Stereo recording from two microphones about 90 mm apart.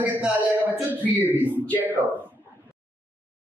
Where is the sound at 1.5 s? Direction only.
20° left (ahead or behind).